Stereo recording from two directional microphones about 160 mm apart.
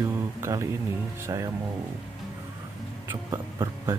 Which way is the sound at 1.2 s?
20° right (ahead or behind).